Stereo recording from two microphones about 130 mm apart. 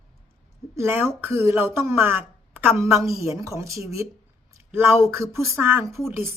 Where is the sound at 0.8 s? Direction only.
20° right (ahead or behind).